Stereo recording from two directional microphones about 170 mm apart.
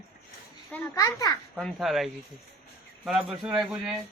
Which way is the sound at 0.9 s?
20° left (ahead or behind).